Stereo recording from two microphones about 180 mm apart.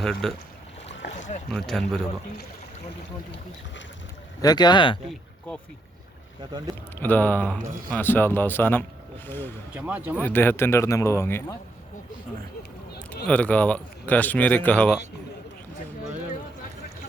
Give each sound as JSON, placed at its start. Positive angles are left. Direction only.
{"t": 0.0, "sound": "speech", "side_deg": 0}
{"t": 1.5, "sound": "speech", "side_deg": 0}
{"t": 4.4, "sound": "speech", "side_deg": 20}
{"t": 6.9, "sound": "speech", "side_deg": 10}
{"t": 9.7, "sound": "speech", "side_deg": -10}
{"t": 10.2, "sound": "speech", "side_deg": 10}
{"t": 13.2, "sound": "speech", "side_deg": 10}